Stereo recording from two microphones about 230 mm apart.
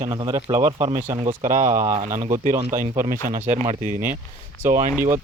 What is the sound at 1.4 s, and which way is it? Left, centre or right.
Speech, right.